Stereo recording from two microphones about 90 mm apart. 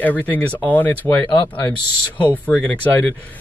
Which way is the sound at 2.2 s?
15° left (ahead or behind).